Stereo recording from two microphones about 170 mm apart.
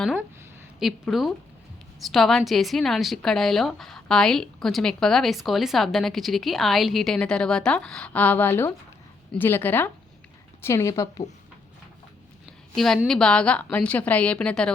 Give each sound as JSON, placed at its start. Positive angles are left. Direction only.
{"t": 0.8, "sound": "a woman's voice", "side_deg": 0}
{"t": 12.7, "sound": "a woman's voice", "side_deg": 0}